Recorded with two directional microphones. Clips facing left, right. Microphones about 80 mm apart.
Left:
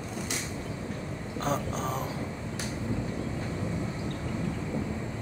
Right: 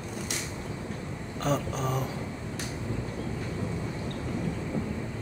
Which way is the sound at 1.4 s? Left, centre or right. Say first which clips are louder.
Right 1 dB; left.